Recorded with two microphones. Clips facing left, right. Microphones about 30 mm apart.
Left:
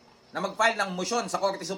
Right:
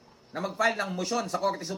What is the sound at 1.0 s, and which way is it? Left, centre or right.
Speech, left.